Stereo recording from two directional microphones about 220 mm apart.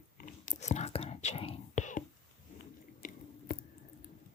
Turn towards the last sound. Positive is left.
turn(degrees=40)  # may be behind; listen again after turning